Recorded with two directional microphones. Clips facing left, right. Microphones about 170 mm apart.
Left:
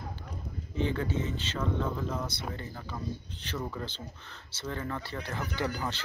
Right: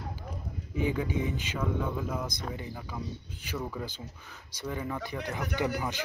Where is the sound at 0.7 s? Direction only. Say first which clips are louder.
Right 1 dB; 10° right (ahead or behind).